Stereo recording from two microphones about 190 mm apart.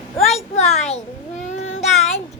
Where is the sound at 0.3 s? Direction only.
35° left (ahead or behind).